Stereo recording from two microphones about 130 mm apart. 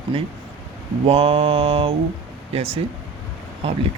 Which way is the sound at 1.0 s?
45° right (ahead or behind).